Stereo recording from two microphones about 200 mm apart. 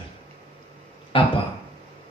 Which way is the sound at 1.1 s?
25° left (ahead or behind).